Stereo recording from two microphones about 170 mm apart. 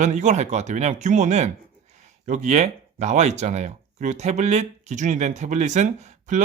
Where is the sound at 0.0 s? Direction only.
45° right (ahead or behind).